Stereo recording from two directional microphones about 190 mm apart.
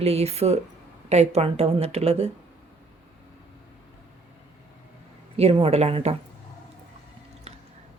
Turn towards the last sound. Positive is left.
turn(degrees=-35)  # may be behind; listen again after turning